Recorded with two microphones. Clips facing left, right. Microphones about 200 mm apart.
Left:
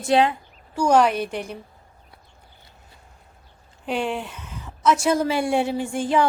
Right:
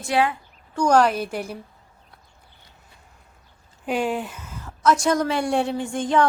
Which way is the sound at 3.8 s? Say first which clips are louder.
Right 2 dB; 5° right (ahead or behind).